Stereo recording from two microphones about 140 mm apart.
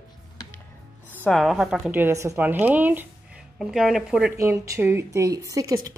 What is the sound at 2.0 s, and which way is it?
A woman's voice, 20° right (ahead or behind).